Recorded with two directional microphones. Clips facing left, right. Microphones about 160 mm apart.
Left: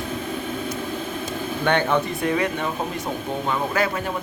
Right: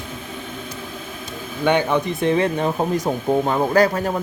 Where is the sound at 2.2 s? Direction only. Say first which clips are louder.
Right 4 dB; 30° right (ahead or behind).